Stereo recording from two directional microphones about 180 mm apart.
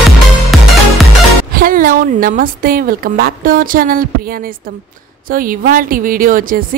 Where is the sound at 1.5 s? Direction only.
50° right (ahead or behind).